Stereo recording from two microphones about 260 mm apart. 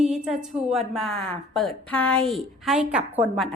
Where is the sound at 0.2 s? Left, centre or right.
Centre.